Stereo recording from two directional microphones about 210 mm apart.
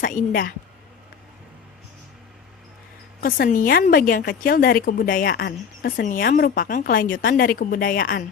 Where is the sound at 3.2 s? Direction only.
40° left (ahead or behind).